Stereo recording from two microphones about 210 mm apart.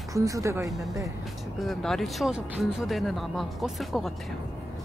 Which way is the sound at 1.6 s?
Centre (ahead or behind).